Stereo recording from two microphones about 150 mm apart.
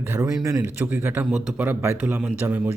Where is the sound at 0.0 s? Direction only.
15° right (ahead or behind).